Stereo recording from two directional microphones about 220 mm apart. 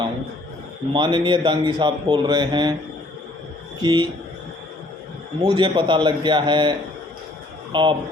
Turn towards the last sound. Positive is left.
turn(degrees=-20)  # may be behind; listen again after turning